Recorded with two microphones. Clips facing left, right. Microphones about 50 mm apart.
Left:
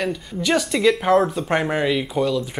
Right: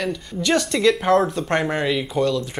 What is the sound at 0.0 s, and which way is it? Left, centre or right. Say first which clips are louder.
Speech: even; centre.